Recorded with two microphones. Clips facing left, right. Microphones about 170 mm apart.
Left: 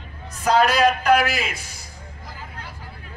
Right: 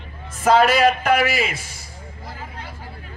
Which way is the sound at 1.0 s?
55° right (ahead or behind).